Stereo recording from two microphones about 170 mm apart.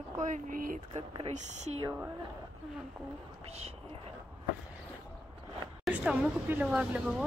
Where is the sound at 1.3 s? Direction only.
40° right (ahead or behind).